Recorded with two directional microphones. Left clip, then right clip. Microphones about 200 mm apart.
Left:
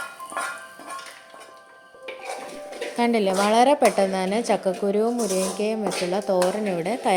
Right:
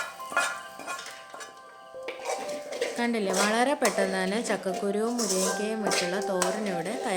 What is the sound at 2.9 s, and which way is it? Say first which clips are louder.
Speech: left 8 dB; 25° left (ahead or behind).